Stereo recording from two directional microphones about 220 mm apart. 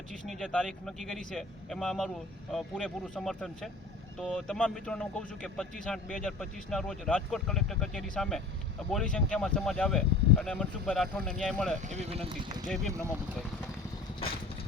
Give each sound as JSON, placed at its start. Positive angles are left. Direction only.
{"t": 0.3, "sound": "speech", "side_deg": 5}
{"t": 11.8, "sound": "speech", "side_deg": -30}
{"t": 12.6, "sound": "speech", "side_deg": 0}